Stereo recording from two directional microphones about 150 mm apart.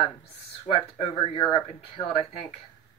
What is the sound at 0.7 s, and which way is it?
Speech, 35° left (ahead or behind).